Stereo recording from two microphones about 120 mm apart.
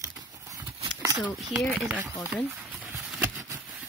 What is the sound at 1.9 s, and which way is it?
Speech, 15° right (ahead or behind).